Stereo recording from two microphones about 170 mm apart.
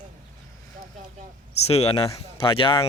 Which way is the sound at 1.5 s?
40° left (ahead or behind).